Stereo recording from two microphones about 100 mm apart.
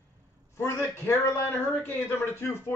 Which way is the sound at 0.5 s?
25° left (ahead or behind).